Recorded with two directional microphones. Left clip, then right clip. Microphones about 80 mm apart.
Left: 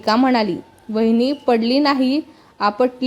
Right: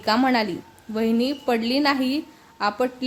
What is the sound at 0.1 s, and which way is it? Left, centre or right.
A woman's voice, left.